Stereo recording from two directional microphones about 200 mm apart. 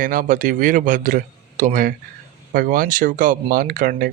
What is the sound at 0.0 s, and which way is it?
Speech, 45° right (ahead or behind).